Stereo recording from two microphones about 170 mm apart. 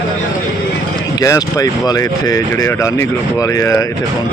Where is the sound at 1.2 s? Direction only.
20° left (ahead or behind).